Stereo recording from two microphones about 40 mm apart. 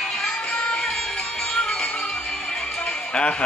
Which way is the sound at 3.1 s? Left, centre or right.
Left.